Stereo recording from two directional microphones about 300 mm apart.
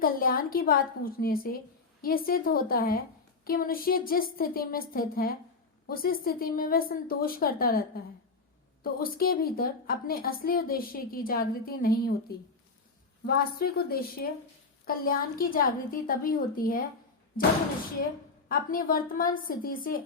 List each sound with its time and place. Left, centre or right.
0.0 s a woman's voice: left
13.2 s a woman's voice: left
18.4 s a woman's voice: left